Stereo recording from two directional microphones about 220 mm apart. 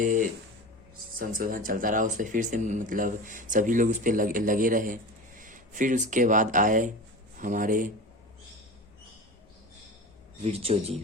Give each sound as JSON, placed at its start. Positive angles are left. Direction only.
{"t": 0.0, "sound": "speech", "side_deg": -35}
{"t": 10.4, "sound": "speech", "side_deg": -25}